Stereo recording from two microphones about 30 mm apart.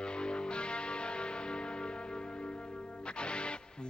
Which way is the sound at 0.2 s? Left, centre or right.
Left.